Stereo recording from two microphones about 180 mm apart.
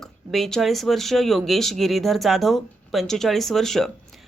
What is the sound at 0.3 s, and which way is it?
Speech, centre (ahead or behind).